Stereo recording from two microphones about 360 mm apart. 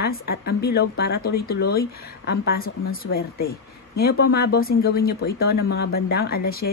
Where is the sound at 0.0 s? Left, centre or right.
Left.